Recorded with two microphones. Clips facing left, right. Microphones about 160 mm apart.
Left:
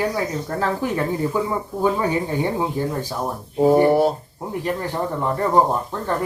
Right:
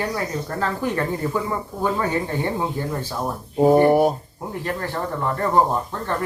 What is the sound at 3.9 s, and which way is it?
Speech, 15° right (ahead or behind).